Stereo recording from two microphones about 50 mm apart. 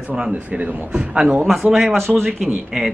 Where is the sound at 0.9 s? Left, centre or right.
Right.